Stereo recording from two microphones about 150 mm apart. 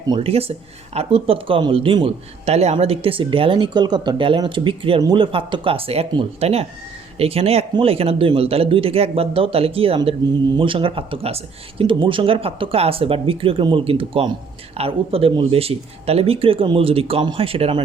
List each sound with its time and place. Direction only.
0.1 s speech: 40° right (ahead or behind)